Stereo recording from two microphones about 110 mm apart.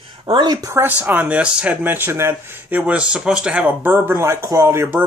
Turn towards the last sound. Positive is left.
turn(degrees=-20)  # may be behind; listen again after turning